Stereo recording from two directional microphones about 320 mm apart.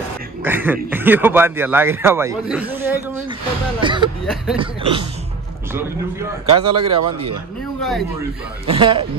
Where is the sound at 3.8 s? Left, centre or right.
Centre.